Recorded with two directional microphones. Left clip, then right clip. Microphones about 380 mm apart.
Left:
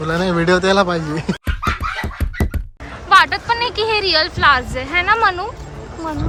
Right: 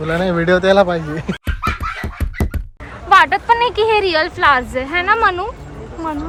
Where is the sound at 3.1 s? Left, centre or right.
Centre.